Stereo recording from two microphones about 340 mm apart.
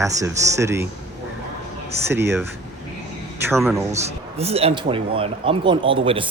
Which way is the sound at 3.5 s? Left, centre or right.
Centre.